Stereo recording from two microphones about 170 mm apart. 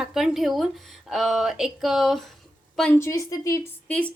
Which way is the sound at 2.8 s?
10° left (ahead or behind).